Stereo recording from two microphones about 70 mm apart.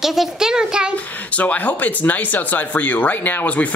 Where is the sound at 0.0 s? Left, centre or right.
Centre.